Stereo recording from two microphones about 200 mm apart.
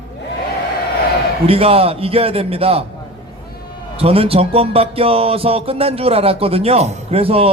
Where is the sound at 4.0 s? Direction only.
30° right (ahead or behind).